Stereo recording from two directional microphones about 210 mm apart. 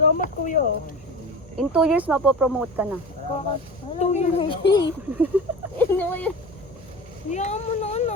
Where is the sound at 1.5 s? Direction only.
5° right (ahead or behind).